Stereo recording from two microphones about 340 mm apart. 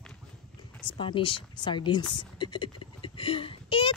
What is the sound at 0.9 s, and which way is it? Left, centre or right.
Speech, centre.